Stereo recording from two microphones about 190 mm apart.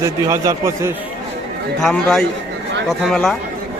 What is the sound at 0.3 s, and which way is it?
Speech, 15° right (ahead or behind).